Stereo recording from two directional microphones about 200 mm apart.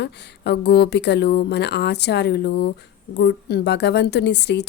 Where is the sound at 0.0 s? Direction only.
55° left (ahead or behind).